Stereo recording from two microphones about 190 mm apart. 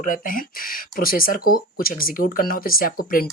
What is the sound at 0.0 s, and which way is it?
Speech, 45° left (ahead or behind).